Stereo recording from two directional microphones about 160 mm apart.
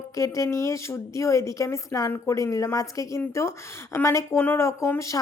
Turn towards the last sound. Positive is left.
turn(degrees=20)  # may be behind; listen again after turning